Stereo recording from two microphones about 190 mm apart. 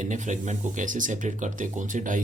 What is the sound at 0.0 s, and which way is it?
Speech, 40° right (ahead or behind).